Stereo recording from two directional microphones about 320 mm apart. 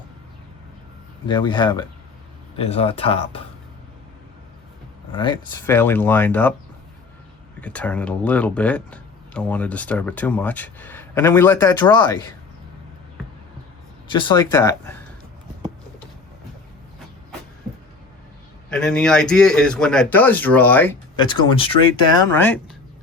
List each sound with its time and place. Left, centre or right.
1.3 s speech: centre
5.1 s speech: centre
7.6 s speech: centre
14.1 s speech: centre
18.7 s speech: centre